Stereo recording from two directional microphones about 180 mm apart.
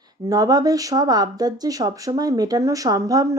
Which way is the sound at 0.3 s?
20° right (ahead or behind).